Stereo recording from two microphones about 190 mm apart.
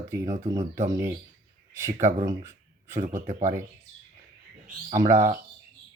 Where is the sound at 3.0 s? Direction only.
40° right (ahead or behind).